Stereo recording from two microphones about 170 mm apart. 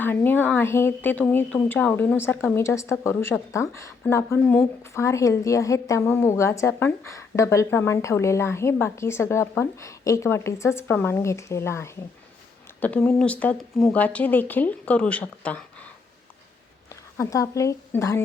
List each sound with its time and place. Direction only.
0.0 s a woman's voice: 10° left (ahead or behind)
16.9 s speech: 20° left (ahead or behind)